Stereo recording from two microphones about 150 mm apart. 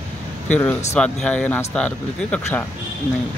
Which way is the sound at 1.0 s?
5° left (ahead or behind).